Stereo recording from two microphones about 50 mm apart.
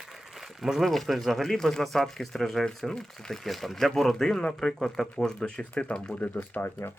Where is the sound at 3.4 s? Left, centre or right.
Centre; by 6.0 s left.